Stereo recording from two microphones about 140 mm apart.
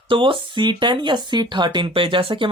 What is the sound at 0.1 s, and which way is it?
Speech, 35° right (ahead or behind).